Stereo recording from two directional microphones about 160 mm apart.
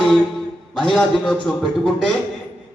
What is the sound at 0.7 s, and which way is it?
A man's voice, 5° left (ahead or behind).